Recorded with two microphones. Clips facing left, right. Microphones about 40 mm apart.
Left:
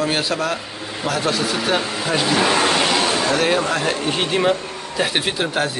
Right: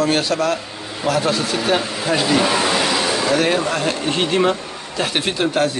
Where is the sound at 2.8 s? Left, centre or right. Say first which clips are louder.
Left 1 dB; left.